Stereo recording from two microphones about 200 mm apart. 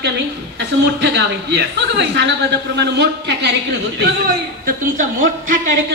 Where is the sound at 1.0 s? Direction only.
55° right (ahead or behind).